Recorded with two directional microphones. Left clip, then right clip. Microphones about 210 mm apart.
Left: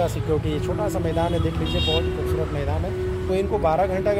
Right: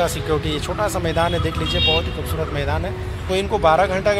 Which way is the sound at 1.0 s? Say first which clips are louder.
Right 5 dB; 10° right (ahead or behind).